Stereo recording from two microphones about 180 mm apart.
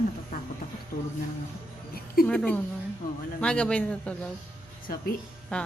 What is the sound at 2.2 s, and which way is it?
A man's voice, 5° left (ahead or behind).